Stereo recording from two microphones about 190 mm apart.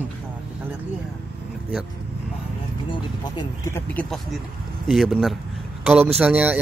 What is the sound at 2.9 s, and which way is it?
Speech, 20° left (ahead or behind).